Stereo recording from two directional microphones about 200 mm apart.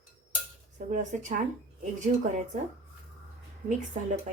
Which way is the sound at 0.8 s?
40° right (ahead or behind).